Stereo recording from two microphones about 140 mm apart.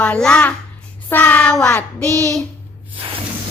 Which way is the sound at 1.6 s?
20° left (ahead or behind).